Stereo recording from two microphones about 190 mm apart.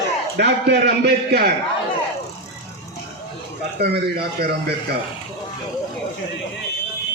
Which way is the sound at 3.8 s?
60° right (ahead or behind).